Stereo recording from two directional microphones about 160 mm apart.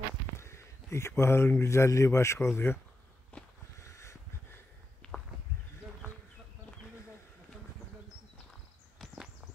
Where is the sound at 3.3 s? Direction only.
10° left (ahead or behind).